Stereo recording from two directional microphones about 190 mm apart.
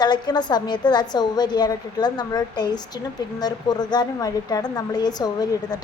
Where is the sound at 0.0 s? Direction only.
20° left (ahead or behind).